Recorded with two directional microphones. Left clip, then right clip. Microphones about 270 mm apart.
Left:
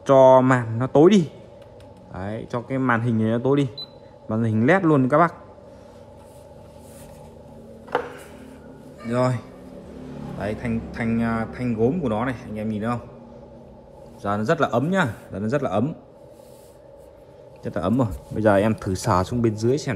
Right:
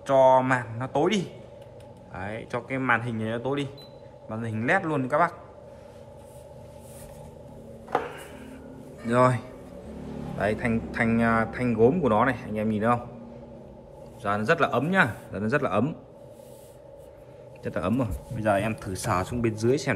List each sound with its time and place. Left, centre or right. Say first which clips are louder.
0.0 s speech: left 6 dB; left
9.0 s speech: right 2 dB; centre
14.2 s speech: left 2 dB; centre
17.6 s speech: left 4 dB; centre